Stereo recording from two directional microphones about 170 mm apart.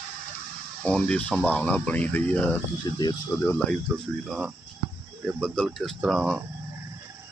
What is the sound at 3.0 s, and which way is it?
Speech, 25° left (ahead or behind).